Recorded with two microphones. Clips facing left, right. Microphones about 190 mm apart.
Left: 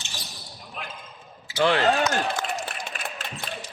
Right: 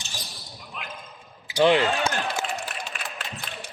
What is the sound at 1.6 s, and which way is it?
Speech, 15° right (ahead or behind).